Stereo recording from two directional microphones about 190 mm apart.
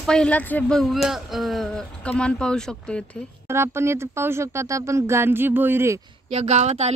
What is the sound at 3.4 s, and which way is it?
Speech, 15° right (ahead or behind).